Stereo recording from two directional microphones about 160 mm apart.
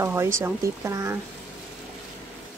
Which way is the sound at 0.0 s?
15° right (ahead or behind).